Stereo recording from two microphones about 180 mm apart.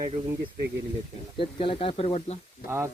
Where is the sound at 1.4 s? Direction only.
30° left (ahead or behind).